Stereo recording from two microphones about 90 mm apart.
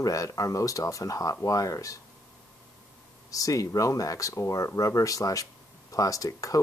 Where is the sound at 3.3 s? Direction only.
40° left (ahead or behind).